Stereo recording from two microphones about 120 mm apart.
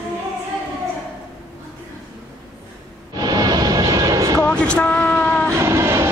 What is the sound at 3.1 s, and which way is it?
Vehicle, 35° right (ahead or behind).